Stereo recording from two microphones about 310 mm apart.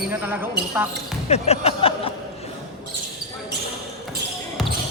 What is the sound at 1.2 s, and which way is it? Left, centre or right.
Music, centre.